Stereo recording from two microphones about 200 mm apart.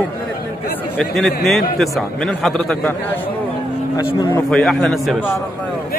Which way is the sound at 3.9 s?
20° left (ahead or behind).